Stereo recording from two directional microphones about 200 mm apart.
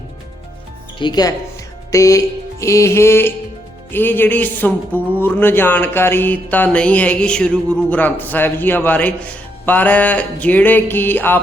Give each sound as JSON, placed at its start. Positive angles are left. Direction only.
{"t": 0.9, "sound": "speech", "side_deg": 20}